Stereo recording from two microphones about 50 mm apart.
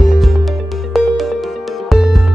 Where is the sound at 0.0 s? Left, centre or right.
Centre.